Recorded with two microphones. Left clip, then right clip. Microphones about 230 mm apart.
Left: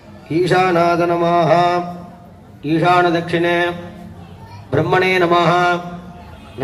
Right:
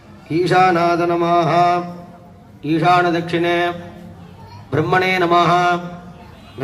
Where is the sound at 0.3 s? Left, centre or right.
Right.